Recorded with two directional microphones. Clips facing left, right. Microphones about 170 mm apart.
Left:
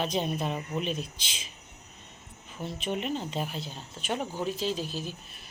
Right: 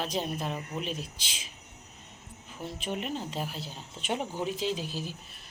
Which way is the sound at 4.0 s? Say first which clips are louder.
Even; 25° right (ahead or behind).